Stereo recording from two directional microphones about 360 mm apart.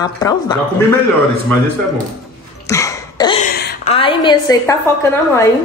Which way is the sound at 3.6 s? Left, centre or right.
Left.